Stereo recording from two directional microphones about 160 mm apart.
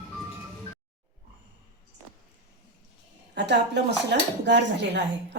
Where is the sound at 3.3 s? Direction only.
90° right.